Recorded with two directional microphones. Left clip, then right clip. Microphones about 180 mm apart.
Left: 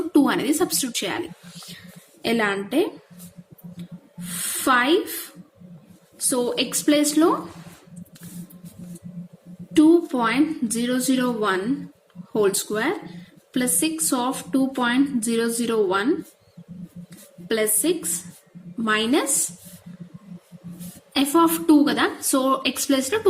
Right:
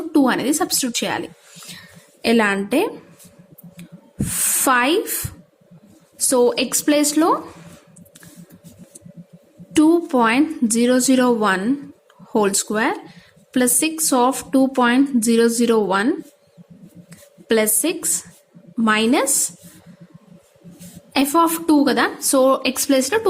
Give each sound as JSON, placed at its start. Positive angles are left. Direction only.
{"t": 0.1, "sound": "a woman's voice", "side_deg": -25}
{"t": 2.2, "sound": "a woman's voice", "side_deg": -40}
{"t": 3.8, "sound": "a sound", "side_deg": -45}
{"t": 6.2, "sound": "a woman's voice", "side_deg": -40}
{"t": 9.7, "sound": "a woman's voice", "side_deg": -40}
{"t": 17.5, "sound": "a woman's voice", "side_deg": -35}
{"t": 21.1, "sound": "a woman's voice", "side_deg": -35}